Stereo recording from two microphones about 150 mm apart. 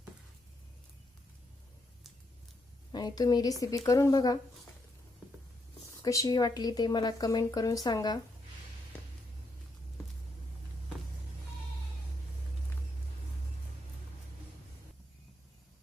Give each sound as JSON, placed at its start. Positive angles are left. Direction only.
{"t": 2.9, "sound": "speech", "side_deg": 30}
{"t": 6.0, "sound": "speech", "side_deg": 25}